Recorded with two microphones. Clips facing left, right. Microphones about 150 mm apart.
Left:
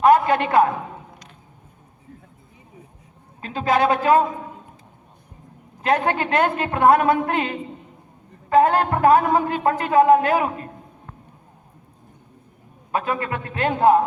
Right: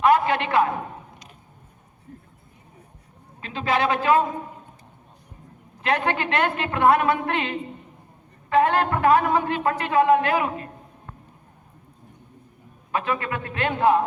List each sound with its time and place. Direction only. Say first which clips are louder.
0.0 s a man's voice: left 3 dB; 45° left (ahead or behind)
3.4 s a man's voice: left 4 dB; 40° left (ahead or behind)
5.8 s a man's voice: left 3 dB; 40° left (ahead or behind)
12.9 s a man's voice: left 2 dB; 40° left (ahead or behind)